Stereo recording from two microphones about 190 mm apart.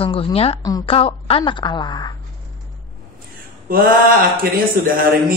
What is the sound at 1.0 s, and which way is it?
Speech, 30° left (ahead or behind).